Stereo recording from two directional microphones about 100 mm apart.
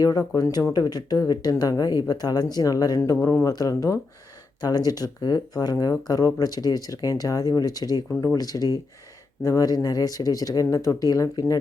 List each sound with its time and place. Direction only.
0.0 s speech: 40° left (ahead or behind)
3.2 s speech: 25° left (ahead or behind)
3.4 s speech: 35° left (ahead or behind)